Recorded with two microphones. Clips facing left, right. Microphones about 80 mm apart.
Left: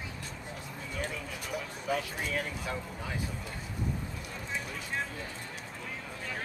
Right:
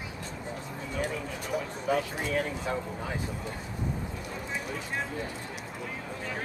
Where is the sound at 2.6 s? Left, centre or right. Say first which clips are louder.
Right 5 dB; right.